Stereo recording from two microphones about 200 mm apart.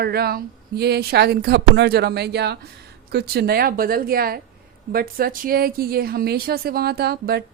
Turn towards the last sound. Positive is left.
turn(degrees=-50)  # may be behind; listen again after turning